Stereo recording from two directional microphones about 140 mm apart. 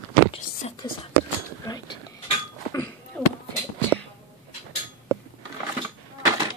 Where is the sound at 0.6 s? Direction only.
50° left (ahead or behind).